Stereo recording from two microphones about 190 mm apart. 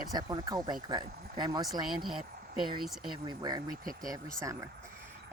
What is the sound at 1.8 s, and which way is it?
Speech, centre (ahead or behind).